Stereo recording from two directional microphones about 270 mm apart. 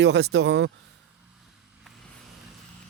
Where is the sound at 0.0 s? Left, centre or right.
Right.